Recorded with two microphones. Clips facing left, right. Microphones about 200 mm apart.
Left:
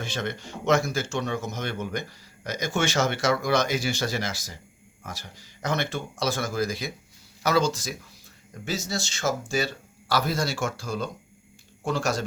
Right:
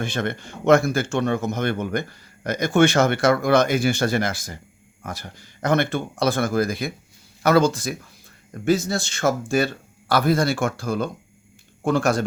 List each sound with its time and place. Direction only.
0.0 s speech: 55° right (ahead or behind)